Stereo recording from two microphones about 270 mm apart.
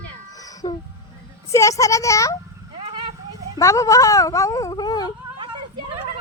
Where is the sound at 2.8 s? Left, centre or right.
Centre.